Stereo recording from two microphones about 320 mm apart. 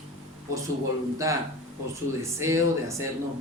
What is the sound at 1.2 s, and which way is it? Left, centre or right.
Speech, centre.